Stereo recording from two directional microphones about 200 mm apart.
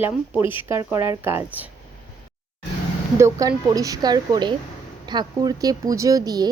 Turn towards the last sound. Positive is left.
turn(degrees=-20)  # may be behind; listen again after turning